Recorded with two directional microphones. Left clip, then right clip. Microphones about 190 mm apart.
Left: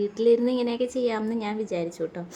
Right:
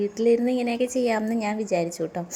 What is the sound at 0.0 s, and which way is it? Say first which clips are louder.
A woman's voice: even; 10° right (ahead or behind).